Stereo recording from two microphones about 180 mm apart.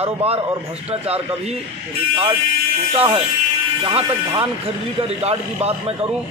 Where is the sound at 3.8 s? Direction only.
30° right (ahead or behind).